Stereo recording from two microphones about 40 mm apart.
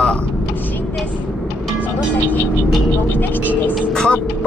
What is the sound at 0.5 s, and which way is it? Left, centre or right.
Vehicle, left.